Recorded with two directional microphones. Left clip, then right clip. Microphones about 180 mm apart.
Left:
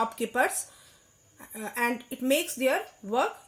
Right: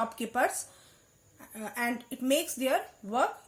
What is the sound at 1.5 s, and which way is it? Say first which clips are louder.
Speech: left 4 dB; 50° left (ahead or behind).